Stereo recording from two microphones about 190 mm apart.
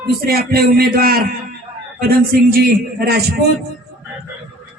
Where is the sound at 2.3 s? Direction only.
55° right (ahead or behind).